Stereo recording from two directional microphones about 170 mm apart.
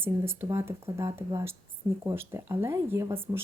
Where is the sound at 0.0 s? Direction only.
15° right (ahead or behind).